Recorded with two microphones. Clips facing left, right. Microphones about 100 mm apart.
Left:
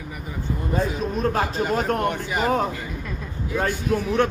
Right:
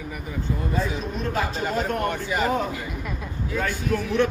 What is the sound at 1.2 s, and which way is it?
Speech, 45° left (ahead or behind).